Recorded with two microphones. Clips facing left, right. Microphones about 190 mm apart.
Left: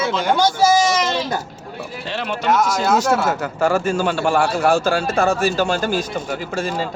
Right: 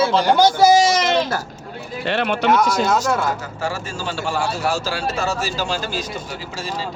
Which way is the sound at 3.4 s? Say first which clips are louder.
Left 8 dB; 55° left (ahead or behind).